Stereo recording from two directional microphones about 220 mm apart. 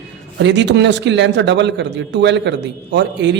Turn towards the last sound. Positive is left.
turn(degrees=-55)  # may be behind; listen again after turning